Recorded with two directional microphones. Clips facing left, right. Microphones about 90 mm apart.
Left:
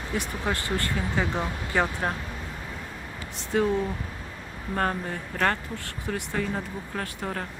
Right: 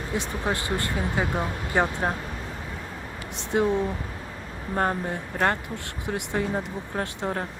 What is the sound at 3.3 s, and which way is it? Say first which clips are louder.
Speech: right 1 dB; 20° right (ahead or behind).